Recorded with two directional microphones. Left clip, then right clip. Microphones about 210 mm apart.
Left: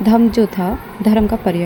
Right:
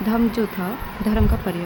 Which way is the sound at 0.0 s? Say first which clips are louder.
Left 8 dB; 20° left (ahead or behind).